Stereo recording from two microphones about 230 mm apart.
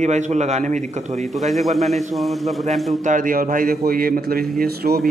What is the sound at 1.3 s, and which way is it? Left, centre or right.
Speech, centre.